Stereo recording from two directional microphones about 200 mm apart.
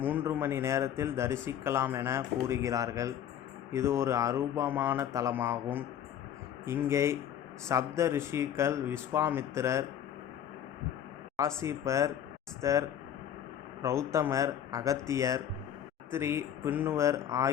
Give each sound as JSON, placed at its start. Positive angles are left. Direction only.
{"t": 0.0, "sound": "speech", "side_deg": -10}
{"t": 11.3, "sound": "speech", "side_deg": -15}
{"t": 13.8, "sound": "speech", "side_deg": -15}